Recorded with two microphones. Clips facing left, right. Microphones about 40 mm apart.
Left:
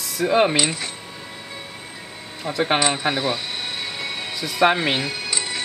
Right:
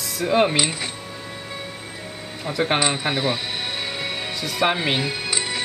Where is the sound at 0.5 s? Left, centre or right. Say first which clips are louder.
Left 1 dB; centre.